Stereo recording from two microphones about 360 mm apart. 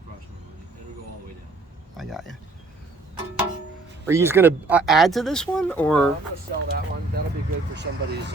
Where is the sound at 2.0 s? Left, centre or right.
Centre.